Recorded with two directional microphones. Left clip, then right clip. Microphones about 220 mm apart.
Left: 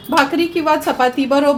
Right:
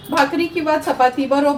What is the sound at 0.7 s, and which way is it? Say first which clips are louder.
Speech: even; 55° left (ahead or behind).